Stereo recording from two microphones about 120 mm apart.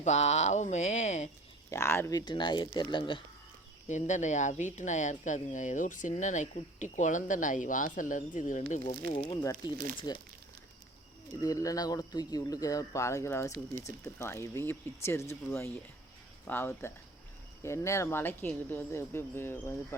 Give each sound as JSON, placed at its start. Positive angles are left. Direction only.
{"t": 0.0, "sound": "speech", "side_deg": 70}
{"t": 1.7, "sound": "speech", "side_deg": 20}
{"t": 2.1, "sound": "speech", "side_deg": 40}
{"t": 3.8, "sound": "speech", "side_deg": 85}
{"t": 8.9, "sound": "speech", "side_deg": 45}
{"t": 11.4, "sound": "speech", "side_deg": 30}